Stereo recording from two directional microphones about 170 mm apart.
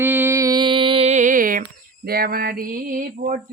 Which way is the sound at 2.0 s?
60° right (ahead or behind).